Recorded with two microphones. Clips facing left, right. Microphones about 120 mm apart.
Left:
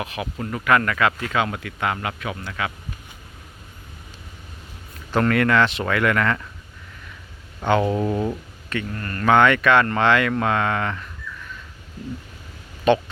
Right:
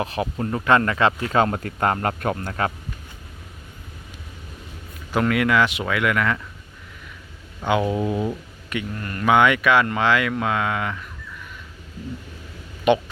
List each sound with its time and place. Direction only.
0.0 s speech: 30° right (ahead or behind)
5.1 s speech: 10° right (ahead or behind)
7.6 s speech: 5° right (ahead or behind)
12.9 s speech: 15° right (ahead or behind)